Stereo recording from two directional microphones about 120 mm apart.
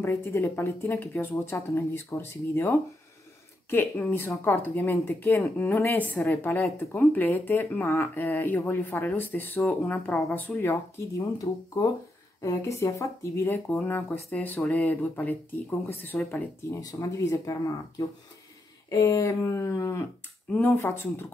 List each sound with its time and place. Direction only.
0.0 s speech: 20° left (ahead or behind)